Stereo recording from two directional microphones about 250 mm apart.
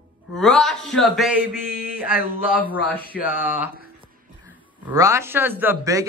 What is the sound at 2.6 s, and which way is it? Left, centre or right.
Speech, centre.